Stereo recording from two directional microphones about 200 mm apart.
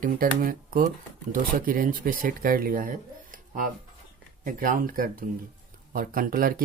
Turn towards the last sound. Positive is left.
turn(degrees=-45)  # may be behind; listen again after turning